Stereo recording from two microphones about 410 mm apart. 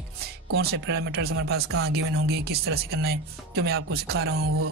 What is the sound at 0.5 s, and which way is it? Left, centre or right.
Speech, right.